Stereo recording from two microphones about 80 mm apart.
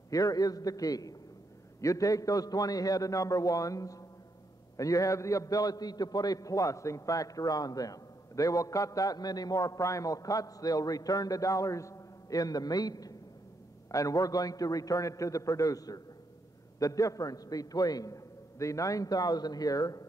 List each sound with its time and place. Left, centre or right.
0.1 s a man's voice: left